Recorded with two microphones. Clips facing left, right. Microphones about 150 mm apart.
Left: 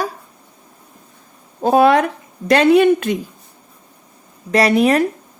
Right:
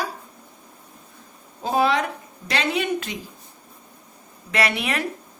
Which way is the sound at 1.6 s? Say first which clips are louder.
Left 9 dB; 55° left (ahead or behind).